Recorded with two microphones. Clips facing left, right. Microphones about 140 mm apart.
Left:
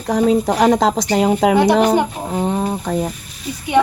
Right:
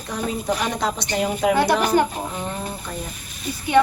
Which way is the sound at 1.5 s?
20° left (ahead or behind).